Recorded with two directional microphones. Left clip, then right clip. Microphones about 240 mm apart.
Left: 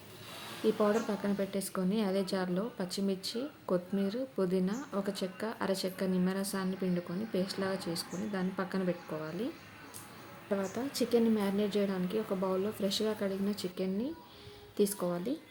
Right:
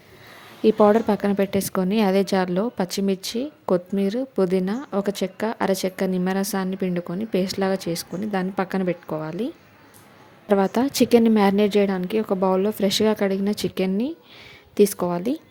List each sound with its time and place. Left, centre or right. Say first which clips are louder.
0.6 s a woman's voice: right 13 dB; right
10.5 s a woman's voice: right 15 dB; right